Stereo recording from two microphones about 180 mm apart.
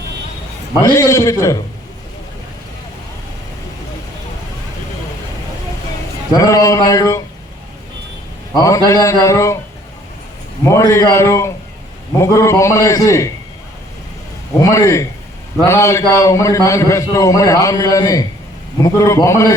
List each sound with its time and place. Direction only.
0.9 s a man's voice: 15° left (ahead or behind)
6.3 s a man's voice: 20° left (ahead or behind)
8.5 s a man's voice: 15° left (ahead or behind)
10.6 s a man's voice: 15° left (ahead or behind)
14.6 s a man's voice: 15° left (ahead or behind)